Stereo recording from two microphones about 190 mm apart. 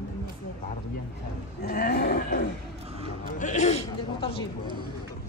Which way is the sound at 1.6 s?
55° left (ahead or behind).